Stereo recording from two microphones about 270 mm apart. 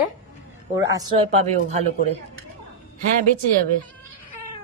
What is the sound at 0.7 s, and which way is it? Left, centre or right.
Speech, centre.